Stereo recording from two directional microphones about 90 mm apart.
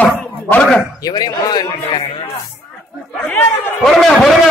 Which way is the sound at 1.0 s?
45° left (ahead or behind).